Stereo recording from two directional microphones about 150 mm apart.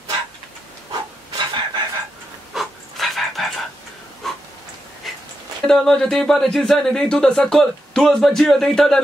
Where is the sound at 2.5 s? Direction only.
Centre (ahead or behind).